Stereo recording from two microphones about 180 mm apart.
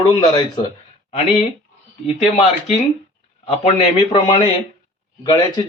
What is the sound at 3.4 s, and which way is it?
Speech, 30° left (ahead or behind).